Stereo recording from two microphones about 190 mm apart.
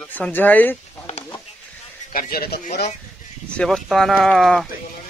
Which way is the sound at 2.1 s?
50° left (ahead or behind).